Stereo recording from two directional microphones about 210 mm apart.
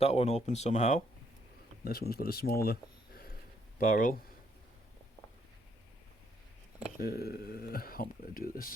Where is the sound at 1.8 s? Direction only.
45° left (ahead or behind).